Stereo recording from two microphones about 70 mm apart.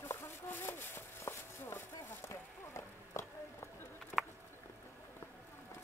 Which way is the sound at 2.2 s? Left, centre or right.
Left.